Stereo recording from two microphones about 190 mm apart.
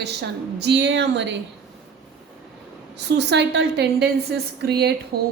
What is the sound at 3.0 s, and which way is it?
A woman's voice, 65° right (ahead or behind).